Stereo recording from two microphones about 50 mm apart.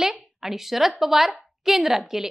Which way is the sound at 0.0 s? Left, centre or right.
Centre.